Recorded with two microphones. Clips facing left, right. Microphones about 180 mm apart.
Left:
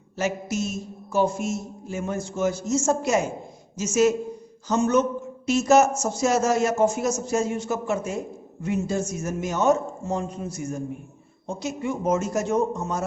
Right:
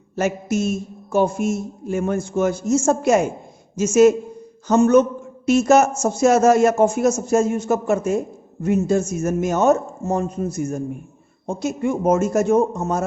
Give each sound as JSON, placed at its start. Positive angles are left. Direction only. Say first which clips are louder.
{"t": 0.2, "sound": "a man's voice", "louder": "right 5 dB", "side_deg": -50}